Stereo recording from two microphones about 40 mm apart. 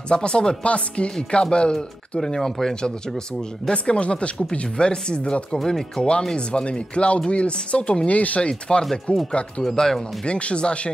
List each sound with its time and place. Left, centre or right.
0.1 s speech: left
5.7 s speech: centre
6.3 s speech: left
8.5 s speech: left
9.8 s speech: centre
10.2 s speech: left